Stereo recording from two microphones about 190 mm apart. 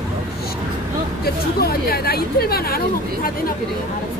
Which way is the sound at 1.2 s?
55° left (ahead or behind).